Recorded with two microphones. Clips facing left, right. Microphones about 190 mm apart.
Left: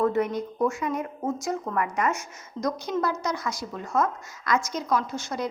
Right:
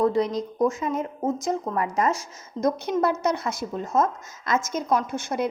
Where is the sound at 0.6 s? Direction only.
20° right (ahead or behind).